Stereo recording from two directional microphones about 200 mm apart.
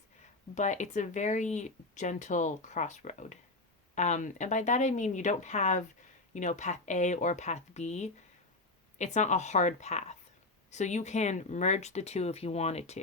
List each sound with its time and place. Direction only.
0.5 s speech: 35° left (ahead or behind)